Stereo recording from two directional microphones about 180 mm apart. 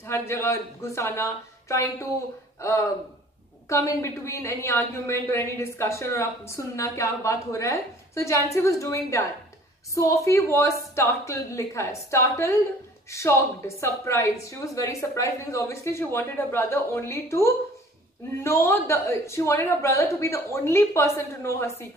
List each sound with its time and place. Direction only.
0.0 s a woman's voice: 15° left (ahead or behind)